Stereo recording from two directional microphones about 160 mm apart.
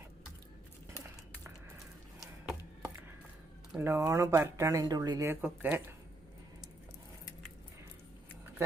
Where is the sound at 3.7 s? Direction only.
15° right (ahead or behind).